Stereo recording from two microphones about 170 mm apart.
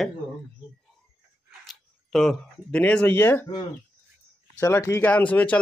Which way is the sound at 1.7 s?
Centre (ahead or behind).